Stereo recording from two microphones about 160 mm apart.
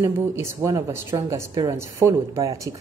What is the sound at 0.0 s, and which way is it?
A woman's voice, 15° right (ahead or behind).